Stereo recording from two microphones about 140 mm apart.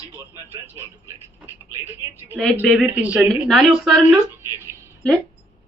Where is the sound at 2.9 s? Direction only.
10° right (ahead or behind).